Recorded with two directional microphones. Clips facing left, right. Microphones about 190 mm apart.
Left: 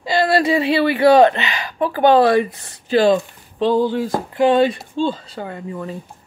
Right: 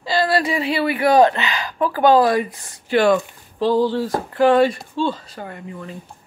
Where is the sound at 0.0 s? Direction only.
25° left (ahead or behind).